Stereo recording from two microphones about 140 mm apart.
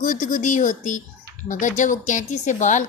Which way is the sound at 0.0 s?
65° left (ahead or behind).